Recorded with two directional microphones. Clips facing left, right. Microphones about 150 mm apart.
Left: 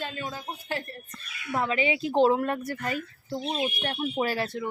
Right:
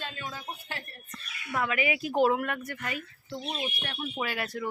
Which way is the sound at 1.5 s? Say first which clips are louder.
Left 3 dB; 25° left (ahead or behind).